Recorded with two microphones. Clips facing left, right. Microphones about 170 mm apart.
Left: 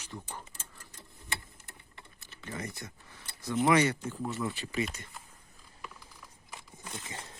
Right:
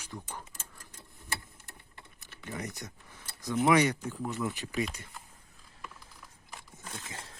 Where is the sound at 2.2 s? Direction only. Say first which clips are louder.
Right 1 dB; 15° right (ahead or behind).